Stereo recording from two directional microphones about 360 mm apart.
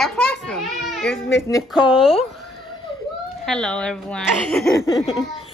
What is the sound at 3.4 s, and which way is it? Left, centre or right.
Speech, centre.